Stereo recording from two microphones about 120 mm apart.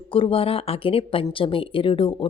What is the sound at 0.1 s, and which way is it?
Speech, 50° left (ahead or behind).